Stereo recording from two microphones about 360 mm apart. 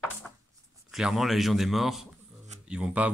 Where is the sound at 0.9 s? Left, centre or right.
Centre.